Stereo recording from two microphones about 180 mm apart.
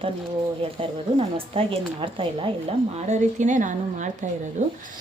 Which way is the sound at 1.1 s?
30° right (ahead or behind).